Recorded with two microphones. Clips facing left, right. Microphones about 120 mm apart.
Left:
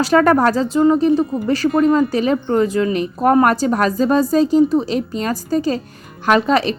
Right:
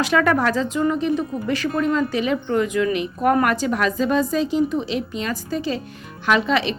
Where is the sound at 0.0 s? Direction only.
40° left (ahead or behind).